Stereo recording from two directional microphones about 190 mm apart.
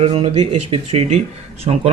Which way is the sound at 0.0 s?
30° right (ahead or behind).